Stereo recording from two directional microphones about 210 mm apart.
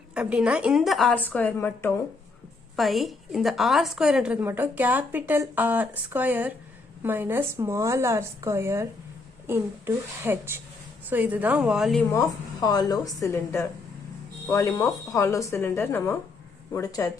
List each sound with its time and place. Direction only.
0.1 s a woman's voice: 5° right (ahead or behind)
12.1 s speech: 15° left (ahead or behind)